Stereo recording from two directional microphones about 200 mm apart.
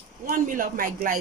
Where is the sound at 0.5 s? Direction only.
45° right (ahead or behind).